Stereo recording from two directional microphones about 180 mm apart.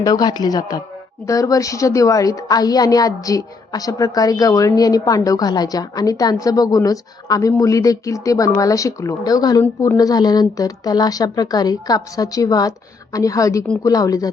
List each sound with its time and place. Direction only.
0.0 s a woman's voice: 20° left (ahead or behind)